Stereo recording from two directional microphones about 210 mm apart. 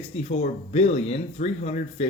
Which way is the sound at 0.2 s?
30° left (ahead or behind).